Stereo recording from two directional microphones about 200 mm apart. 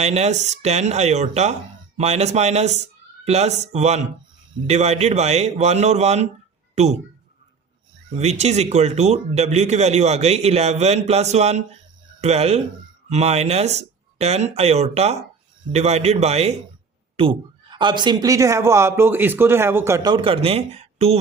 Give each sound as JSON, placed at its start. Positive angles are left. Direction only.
{"t": 0.0, "sound": "speech", "side_deg": -35}
{"t": 8.1, "sound": "a man's voice", "side_deg": -35}